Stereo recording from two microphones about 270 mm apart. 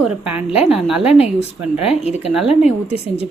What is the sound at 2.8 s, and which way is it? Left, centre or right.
Speech, left.